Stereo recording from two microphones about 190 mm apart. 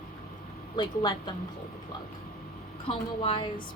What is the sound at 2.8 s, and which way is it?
Speech, 25° left (ahead or behind).